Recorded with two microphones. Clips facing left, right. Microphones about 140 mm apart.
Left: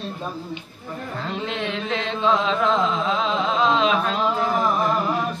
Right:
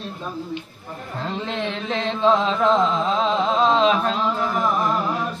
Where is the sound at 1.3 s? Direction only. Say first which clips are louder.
Right 1 dB; 35° right (ahead or behind).